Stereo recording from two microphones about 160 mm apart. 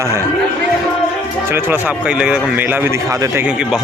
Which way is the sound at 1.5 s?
15° right (ahead or behind).